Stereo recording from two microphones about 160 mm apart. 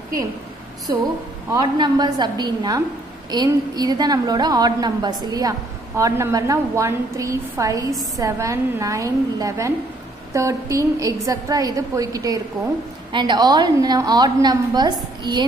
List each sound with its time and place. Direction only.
1.5 s a woman's voice: 25° right (ahead or behind)